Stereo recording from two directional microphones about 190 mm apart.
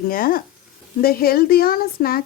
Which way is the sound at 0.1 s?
50° left (ahead or behind).